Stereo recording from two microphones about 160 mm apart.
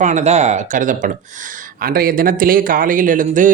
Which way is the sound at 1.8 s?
65° right (ahead or behind).